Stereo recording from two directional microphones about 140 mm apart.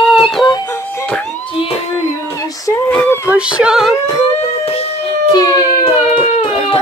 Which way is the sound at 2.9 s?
10° left (ahead or behind).